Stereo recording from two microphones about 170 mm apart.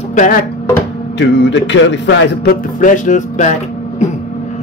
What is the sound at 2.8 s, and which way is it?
Speech, 45° left (ahead or behind).